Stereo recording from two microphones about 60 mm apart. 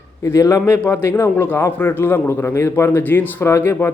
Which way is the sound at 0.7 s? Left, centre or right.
Left.